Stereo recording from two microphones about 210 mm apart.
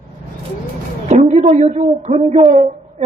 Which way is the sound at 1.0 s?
30° right (ahead or behind).